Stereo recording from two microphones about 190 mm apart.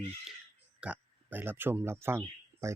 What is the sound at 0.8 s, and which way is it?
Speech, 10° right (ahead or behind).